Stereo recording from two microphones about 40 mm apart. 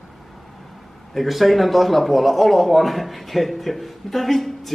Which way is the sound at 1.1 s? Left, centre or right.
Centre.